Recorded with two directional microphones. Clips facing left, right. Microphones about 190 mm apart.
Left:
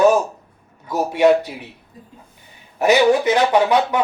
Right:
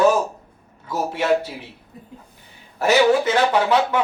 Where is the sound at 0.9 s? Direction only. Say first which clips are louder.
Left 5 dB; 15° left (ahead or behind).